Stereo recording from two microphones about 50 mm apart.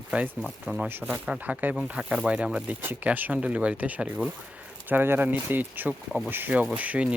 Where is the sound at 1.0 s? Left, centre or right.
Centre.